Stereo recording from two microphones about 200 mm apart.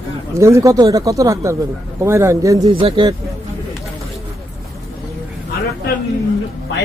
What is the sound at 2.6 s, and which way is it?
Speech, 30° right (ahead or behind).